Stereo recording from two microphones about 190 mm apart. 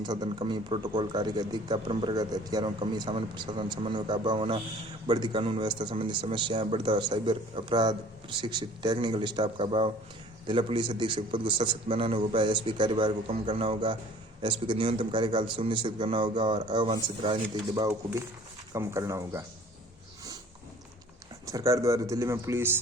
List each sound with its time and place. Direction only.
0.0 s a man's voice: 20° right (ahead or behind)
21.4 s speech: 15° right (ahead or behind)